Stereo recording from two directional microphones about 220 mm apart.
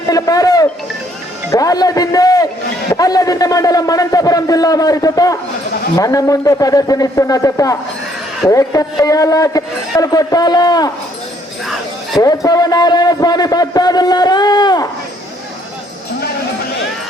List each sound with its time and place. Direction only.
0.1 s a man's voice: 15° left (ahead or behind)
12.2 s a man's voice: 15° left (ahead or behind)